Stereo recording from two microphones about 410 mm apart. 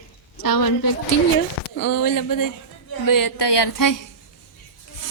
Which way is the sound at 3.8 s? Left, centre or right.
Left.